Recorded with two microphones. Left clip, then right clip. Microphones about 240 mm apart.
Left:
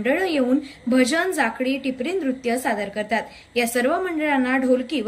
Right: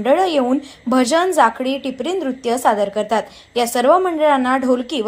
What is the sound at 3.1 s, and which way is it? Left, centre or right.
Speech, right.